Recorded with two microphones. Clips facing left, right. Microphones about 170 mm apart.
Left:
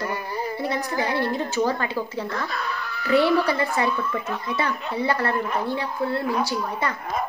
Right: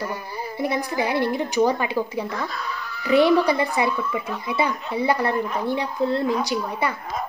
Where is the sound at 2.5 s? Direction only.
65° left (ahead or behind).